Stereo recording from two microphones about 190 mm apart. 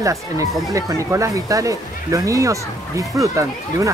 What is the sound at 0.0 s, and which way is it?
Speech, 15° right (ahead or behind).